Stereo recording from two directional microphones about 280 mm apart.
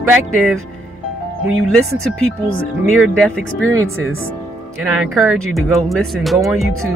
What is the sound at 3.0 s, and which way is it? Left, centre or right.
Speech, centre.